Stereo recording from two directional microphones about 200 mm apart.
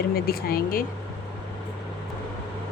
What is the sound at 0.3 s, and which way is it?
Speech, 50° left (ahead or behind).